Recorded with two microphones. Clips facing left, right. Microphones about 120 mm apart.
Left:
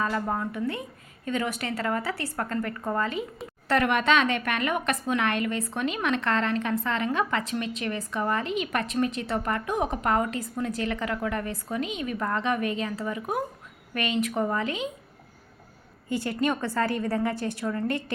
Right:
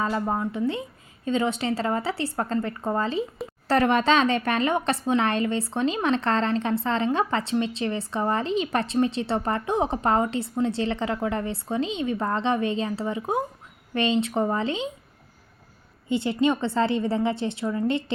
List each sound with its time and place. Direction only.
0.0 s a woman's voice: 20° right (ahead or behind)
16.0 s a woman's voice: 25° right (ahead or behind)